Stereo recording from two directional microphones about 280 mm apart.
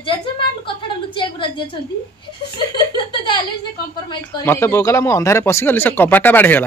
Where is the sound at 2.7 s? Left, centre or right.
Centre.